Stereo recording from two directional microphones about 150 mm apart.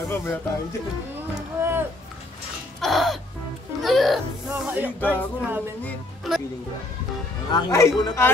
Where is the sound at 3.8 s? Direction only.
Centre (ahead or behind).